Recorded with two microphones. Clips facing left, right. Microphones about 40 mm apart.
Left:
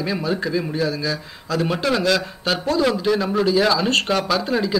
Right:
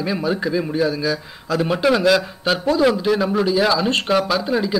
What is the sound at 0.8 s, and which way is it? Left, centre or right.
Speech, right.